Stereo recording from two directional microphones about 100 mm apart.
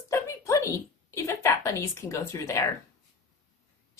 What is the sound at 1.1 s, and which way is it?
A woman's voice, 30° left (ahead or behind).